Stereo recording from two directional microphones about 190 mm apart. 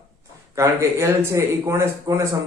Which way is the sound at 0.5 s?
15° right (ahead or behind).